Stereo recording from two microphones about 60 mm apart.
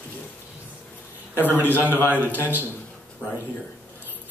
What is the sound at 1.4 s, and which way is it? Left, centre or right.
Speech, left.